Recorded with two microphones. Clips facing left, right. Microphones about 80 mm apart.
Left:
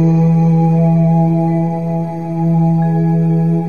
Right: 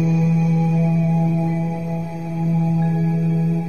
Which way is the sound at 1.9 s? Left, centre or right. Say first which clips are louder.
Left 7 dB; left.